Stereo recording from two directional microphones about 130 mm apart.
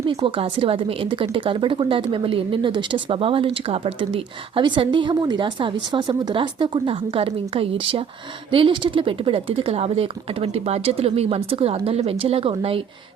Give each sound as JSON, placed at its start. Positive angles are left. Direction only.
{"t": 0.1, "sound": "a woman's voice", "side_deg": -45}